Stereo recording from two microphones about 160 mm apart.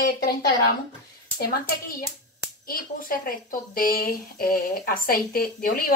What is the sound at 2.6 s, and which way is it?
A woman's voice, 60° left (ahead or behind).